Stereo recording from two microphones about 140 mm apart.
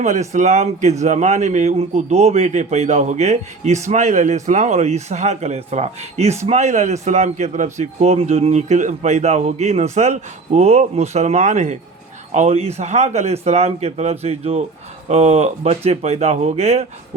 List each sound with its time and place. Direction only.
0.0 s speech: 60° right (ahead or behind)